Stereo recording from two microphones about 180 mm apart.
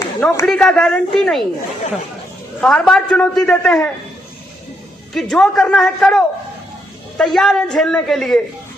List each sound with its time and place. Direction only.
0.0 s a sound: 15° left (ahead or behind)
0.4 s a man's voice: 5° left (ahead or behind)
2.6 s a man's voice: 5° left (ahead or behind)
5.1 s a man's voice: centre (ahead or behind)